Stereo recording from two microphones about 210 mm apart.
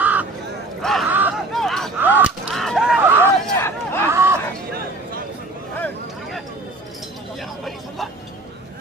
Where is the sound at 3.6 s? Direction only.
10° left (ahead or behind).